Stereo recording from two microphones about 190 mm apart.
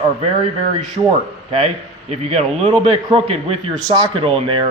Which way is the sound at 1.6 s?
35° right (ahead or behind).